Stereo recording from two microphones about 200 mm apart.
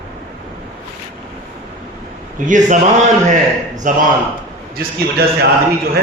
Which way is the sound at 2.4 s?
40° right (ahead or behind).